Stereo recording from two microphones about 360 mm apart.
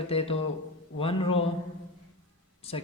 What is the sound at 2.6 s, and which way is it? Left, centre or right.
Speech, centre.